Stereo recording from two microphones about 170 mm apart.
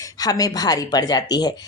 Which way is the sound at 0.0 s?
20° left (ahead or behind).